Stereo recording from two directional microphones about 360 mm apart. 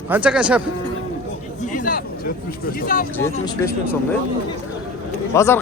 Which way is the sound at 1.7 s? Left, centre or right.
Left.